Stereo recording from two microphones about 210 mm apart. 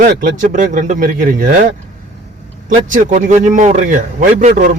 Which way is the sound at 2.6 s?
35° right (ahead or behind).